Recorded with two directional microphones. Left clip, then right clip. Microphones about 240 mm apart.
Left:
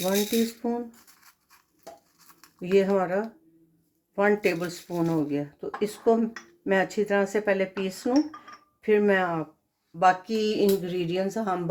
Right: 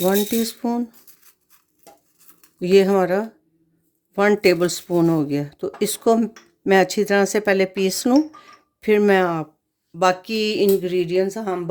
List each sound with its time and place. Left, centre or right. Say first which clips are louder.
0.0 s speech: right 6 dB; right
2.6 s speech: right 7 dB; right